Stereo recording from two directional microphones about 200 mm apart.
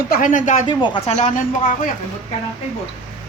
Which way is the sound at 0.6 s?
25° left (ahead or behind).